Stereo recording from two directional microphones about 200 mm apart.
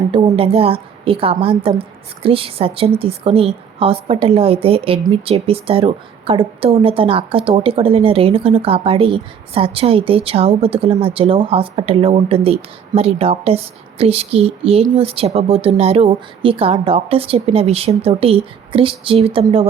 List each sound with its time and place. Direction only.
0.1 s a woman's voice: 25° right (ahead or behind)